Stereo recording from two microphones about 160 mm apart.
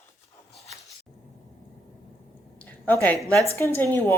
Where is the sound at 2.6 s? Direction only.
10° left (ahead or behind).